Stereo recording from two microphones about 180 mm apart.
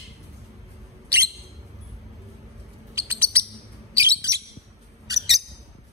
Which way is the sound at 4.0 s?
15° right (ahead or behind).